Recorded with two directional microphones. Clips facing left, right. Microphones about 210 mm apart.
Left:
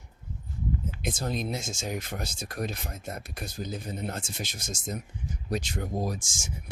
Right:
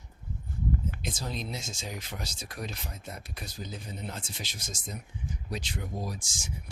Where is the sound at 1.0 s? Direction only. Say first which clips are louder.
Left 5 dB; 50° left (ahead or behind).